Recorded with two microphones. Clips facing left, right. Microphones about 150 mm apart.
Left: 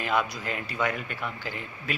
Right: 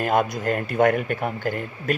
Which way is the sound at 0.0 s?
50° right (ahead or behind).